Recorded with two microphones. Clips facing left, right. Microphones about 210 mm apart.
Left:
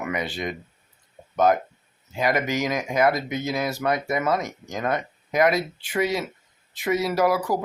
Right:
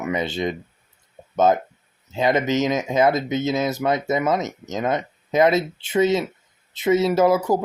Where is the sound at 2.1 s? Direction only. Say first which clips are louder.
Right 4 dB; 25° right (ahead or behind).